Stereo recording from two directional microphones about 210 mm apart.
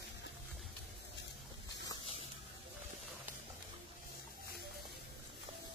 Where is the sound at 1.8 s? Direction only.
20° left (ahead or behind).